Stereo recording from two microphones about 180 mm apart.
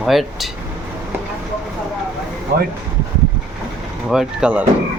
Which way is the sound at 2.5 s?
50° right (ahead or behind).